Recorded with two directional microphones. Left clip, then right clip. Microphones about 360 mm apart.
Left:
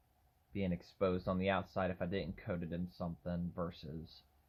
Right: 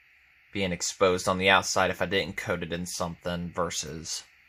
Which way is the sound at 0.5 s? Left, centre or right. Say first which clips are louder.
Right 13 dB; right.